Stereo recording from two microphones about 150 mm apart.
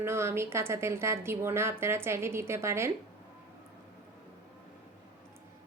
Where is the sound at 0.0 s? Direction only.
15° right (ahead or behind).